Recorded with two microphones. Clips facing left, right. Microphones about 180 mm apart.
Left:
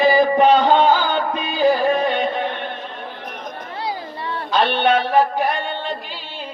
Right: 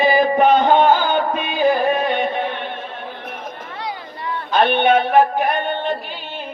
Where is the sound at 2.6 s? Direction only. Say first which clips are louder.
Right 1 dB; 55° right (ahead or behind).